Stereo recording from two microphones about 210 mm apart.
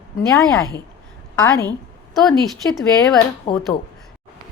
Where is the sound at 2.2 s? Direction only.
5° left (ahead or behind).